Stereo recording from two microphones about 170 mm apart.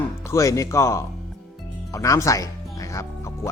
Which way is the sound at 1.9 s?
20° left (ahead or behind).